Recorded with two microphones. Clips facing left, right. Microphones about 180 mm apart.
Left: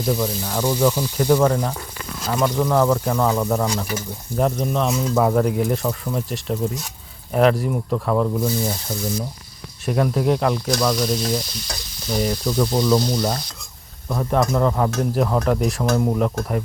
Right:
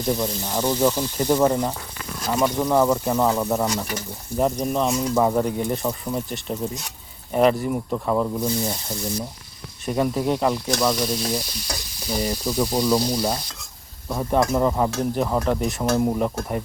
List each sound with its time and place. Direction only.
0.2 s speech: 10° right (ahead or behind)
8.4 s speech: 5° left (ahead or behind)
9.8 s speech: centre (ahead or behind)